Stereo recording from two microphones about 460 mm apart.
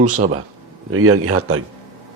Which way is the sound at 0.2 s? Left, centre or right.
Right.